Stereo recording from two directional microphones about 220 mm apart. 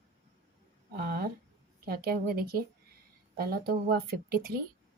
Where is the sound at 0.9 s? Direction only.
45° right (ahead or behind).